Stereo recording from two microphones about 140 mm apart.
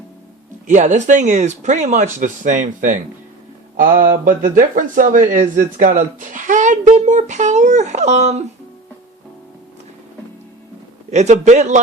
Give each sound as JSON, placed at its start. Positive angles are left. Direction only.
{"t": 0.7, "sound": "speech", "side_deg": -60}
{"t": 3.8, "sound": "speech", "side_deg": -75}
{"t": 11.1, "sound": "speech", "side_deg": -55}